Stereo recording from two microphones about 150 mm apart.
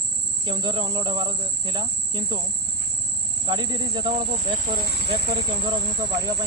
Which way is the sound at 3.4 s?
30° right (ahead or behind).